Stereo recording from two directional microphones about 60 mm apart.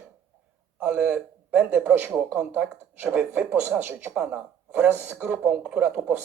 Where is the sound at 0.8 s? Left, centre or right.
Centre.